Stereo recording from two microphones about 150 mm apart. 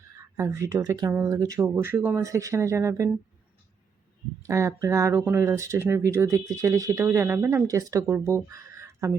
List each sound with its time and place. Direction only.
0.3 s speech: 20° right (ahead or behind)
4.4 s speech: 20° right (ahead or behind)
8.4 s a sound: 20° right (ahead or behind)